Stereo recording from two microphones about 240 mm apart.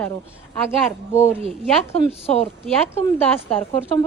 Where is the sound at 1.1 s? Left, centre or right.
Centre.